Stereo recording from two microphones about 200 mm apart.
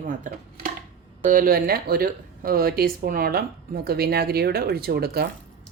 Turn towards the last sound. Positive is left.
turn(degrees=-50)  # may be behind; listen again after turning